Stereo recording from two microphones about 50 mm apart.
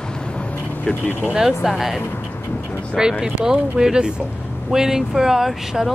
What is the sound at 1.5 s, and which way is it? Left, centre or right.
Speech, centre.